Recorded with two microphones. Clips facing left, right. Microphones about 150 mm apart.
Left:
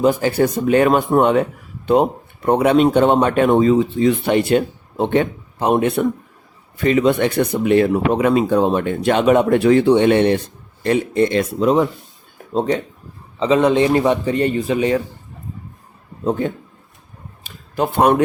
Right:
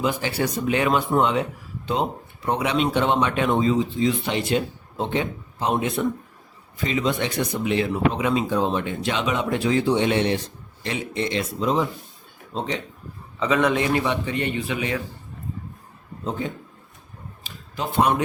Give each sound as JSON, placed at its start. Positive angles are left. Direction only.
{"t": 0.0, "sound": "speech", "side_deg": 45}
{"t": 13.4, "sound": "a man's voice", "side_deg": 30}
{"t": 17.4, "sound": "a sound", "side_deg": 55}